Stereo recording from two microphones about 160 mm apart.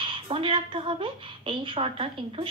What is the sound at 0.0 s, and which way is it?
A woman's voice, 35° right (ahead or behind).